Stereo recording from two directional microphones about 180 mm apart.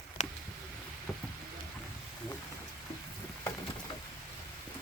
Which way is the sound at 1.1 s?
Centre (ahead or behind).